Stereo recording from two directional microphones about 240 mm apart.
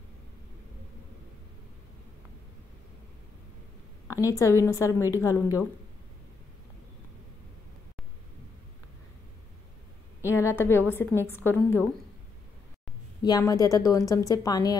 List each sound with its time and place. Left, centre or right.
4.2 s speech: centre
10.2 s a sound: centre
10.9 s speech: centre
13.2 s speech: centre